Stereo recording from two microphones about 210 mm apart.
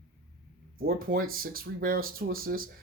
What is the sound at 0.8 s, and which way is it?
Speech, 45° right (ahead or behind).